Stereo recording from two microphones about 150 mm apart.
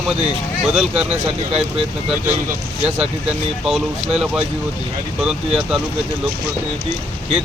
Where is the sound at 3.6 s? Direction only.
5° right (ahead or behind).